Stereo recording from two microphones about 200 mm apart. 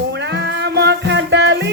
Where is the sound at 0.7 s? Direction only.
60° right (ahead or behind).